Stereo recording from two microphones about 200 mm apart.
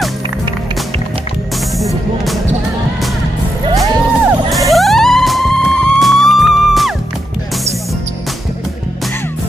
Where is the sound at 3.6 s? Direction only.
20° right (ahead or behind).